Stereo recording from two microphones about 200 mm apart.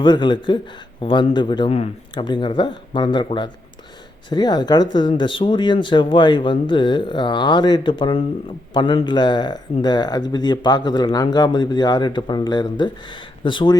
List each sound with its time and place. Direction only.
0.0 s speech: 25° left (ahead or behind)